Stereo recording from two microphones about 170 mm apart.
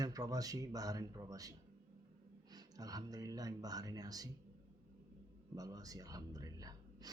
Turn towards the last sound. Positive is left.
turn(degrees=-20)  # may be behind; listen again after turning